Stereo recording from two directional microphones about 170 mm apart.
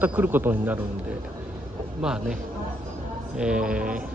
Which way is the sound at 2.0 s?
5° right (ahead or behind).